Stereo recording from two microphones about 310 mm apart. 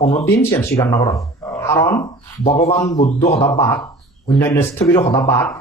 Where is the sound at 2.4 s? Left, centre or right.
Left.